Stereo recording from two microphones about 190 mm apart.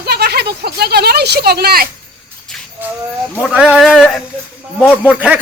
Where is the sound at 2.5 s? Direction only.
Centre (ahead or behind).